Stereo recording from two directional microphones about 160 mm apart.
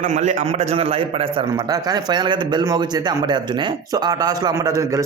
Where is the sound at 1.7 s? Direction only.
25° right (ahead or behind).